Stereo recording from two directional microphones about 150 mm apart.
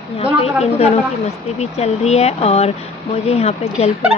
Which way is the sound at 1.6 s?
45° left (ahead or behind).